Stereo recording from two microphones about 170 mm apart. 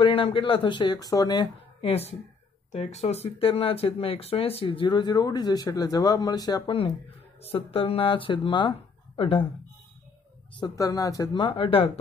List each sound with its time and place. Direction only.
0.0 s speech: 30° left (ahead or behind)
10.5 s speech: 20° left (ahead or behind)